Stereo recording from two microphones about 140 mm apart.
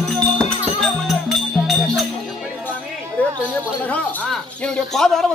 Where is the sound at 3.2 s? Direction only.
10° left (ahead or behind).